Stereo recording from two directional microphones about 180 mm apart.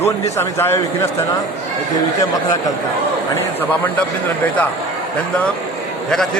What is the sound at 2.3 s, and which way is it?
Speech, 20° left (ahead or behind).